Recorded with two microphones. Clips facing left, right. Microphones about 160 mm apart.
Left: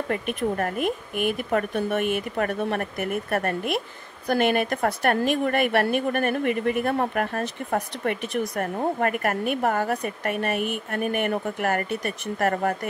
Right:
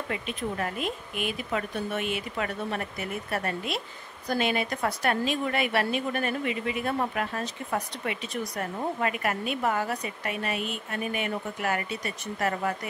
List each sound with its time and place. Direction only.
0.1 s a woman's voice: 55° left (ahead or behind)